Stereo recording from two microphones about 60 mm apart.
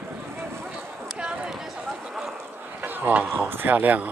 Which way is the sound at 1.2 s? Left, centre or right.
Centre.